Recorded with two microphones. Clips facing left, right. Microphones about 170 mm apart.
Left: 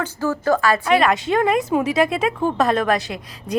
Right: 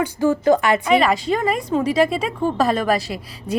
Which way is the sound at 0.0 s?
15° right (ahead or behind).